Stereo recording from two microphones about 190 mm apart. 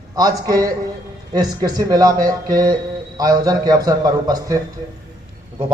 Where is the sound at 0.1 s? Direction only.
20° right (ahead or behind).